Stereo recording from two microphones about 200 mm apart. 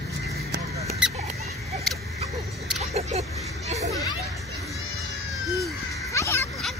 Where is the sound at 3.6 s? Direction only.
35° right (ahead or behind).